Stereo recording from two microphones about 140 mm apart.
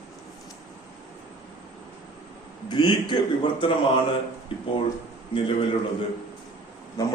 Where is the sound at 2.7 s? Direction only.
35° left (ahead or behind).